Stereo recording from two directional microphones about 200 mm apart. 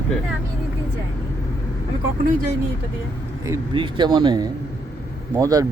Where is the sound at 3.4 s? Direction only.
20° right (ahead or behind).